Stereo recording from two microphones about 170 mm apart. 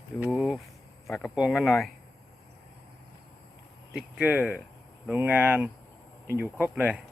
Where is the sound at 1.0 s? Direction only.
5° left (ahead or behind).